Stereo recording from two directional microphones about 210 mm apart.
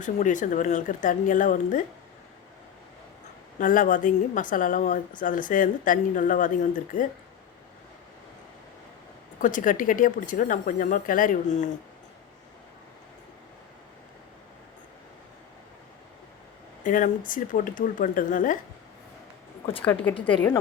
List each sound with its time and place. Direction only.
0.0 s a woman's voice: 35° left (ahead or behind)
3.6 s a woman's voice: 40° left (ahead or behind)
9.4 s a woman's voice: 40° left (ahead or behind)
16.8 s a woman's voice: 40° left (ahead or behind)
20.2 s a woman's voice: 10° left (ahead or behind)